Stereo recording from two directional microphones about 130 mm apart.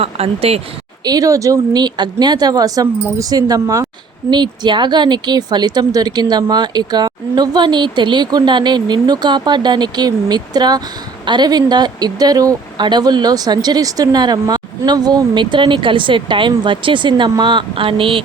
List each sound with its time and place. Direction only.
0.0 s speech: 50° right (ahead or behind)
1.0 s speech: 30° right (ahead or behind)